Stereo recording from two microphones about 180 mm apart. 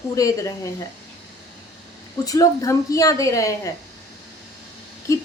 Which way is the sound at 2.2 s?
20° left (ahead or behind).